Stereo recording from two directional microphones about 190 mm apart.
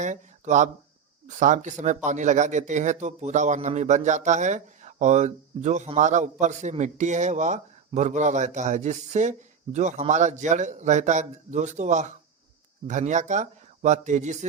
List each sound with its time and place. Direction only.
0.0 s a man's voice: 40° right (ahead or behind)